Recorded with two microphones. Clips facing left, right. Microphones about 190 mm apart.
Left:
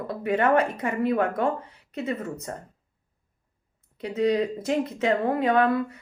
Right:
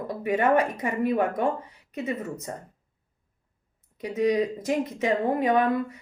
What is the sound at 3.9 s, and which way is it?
Speech, 15° right (ahead or behind).